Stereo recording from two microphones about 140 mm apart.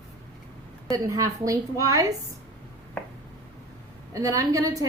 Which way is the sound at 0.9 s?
25° right (ahead or behind).